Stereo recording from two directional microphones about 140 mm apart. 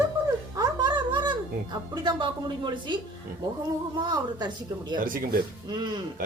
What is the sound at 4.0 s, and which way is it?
A woman's voice, 30° right (ahead or behind).